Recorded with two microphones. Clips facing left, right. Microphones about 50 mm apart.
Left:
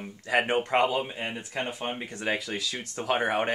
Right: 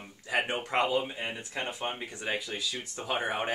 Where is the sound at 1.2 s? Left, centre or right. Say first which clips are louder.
Left 3 dB; centre.